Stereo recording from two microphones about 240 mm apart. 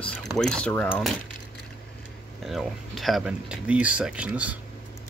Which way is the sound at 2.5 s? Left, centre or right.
Centre.